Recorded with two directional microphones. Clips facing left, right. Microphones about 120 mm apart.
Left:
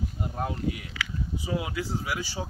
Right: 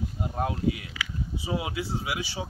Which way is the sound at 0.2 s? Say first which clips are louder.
Right 2 dB; 20° right (ahead or behind).